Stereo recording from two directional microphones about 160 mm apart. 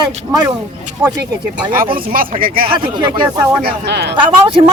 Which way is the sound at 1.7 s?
60° right (ahead or behind).